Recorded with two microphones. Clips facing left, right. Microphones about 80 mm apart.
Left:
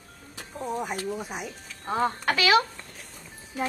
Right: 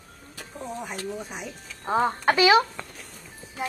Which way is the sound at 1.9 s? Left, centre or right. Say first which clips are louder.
Right 3 dB; right.